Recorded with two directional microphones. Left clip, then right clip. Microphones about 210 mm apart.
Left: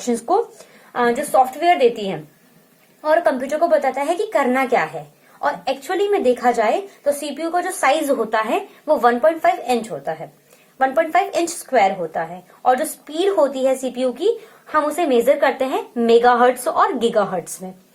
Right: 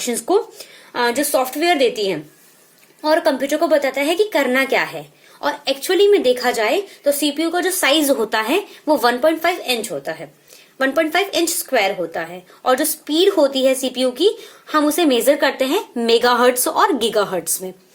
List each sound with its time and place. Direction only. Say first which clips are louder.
0.0 s speech: even; 30° right (ahead or behind)
1.5 s a woman's voice: left 1 dB; 45° right (ahead or behind)